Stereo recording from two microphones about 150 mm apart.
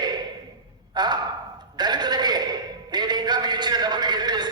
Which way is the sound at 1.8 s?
30° right (ahead or behind).